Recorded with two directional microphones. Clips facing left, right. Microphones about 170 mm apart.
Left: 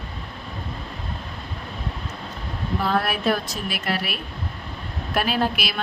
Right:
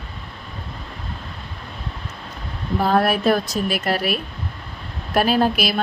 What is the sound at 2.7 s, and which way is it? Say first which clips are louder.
A woman's voice: right 6 dB; 40° right (ahead or behind).